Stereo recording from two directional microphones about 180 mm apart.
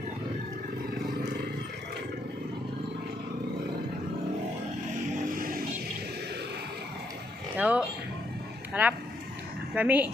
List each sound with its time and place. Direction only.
5.4 s music: 50° right (ahead or behind)
7.5 s a sound: 5° right (ahead or behind)
8.7 s speech: 10° right (ahead or behind)